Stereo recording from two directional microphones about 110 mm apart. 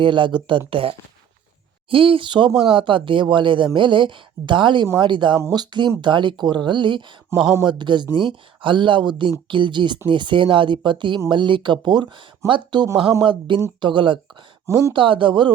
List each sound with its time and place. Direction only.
0.0 s speech: 50° right (ahead or behind)
7.3 s speech: 25° right (ahead or behind)
7.7 s speech: 45° right (ahead or behind)
14.7 s speech: 25° right (ahead or behind)
14.9 s speech: 50° right (ahead or behind)